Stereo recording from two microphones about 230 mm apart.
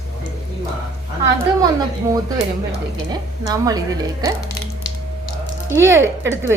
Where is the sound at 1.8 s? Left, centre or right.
Centre.